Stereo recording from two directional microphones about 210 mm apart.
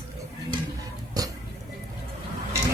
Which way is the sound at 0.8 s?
15° right (ahead or behind).